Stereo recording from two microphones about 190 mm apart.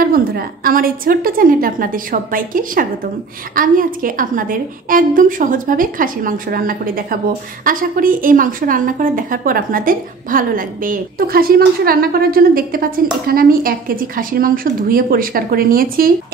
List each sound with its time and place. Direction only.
0.0 s a woman's voice: 50° right (ahead or behind)